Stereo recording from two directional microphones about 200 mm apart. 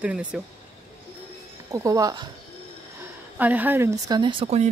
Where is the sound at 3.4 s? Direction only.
10° right (ahead or behind); by 4.7 s 30° right (ahead or behind).